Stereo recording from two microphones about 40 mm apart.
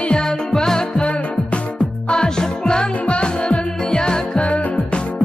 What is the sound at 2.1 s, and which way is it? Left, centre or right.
Music, centre.